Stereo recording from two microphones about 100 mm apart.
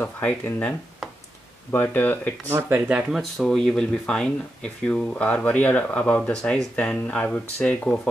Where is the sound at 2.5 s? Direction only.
25° right (ahead or behind).